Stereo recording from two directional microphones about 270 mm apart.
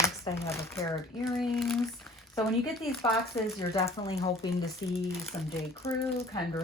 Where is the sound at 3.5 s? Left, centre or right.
Centre.